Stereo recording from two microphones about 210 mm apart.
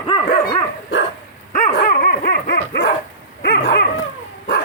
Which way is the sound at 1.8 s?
45° left (ahead or behind).